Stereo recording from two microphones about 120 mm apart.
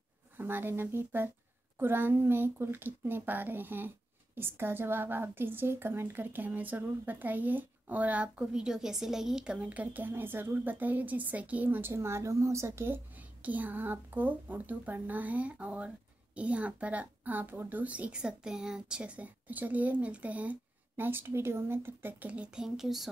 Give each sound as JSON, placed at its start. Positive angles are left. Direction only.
{"t": 0.4, "sound": "a woman's voice", "side_deg": -20}